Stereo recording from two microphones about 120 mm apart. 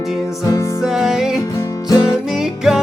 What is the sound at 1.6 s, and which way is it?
Music, 30° left (ahead or behind).